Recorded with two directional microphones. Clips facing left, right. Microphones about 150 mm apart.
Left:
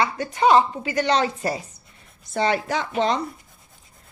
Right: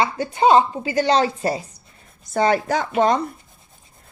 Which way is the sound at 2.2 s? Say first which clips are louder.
Right 4 dB; 45° right (ahead or behind).